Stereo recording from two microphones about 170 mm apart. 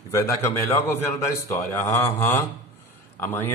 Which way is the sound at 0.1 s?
15° left (ahead or behind).